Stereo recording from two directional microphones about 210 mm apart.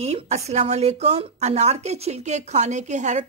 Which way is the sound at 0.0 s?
30° right (ahead or behind).